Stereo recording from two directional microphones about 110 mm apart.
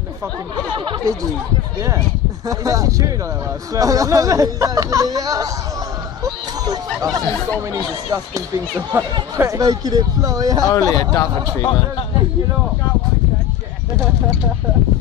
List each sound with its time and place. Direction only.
0.7 s speech: 50° right (ahead or behind)
2.4 s speech: 30° right (ahead or behind)
6.6 s speech: 35° right (ahead or behind)
10.7 s speech: 30° left (ahead or behind)